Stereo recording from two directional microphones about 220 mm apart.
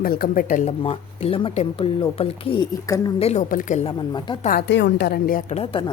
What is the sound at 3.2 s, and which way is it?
Speech, 30° left (ahead or behind).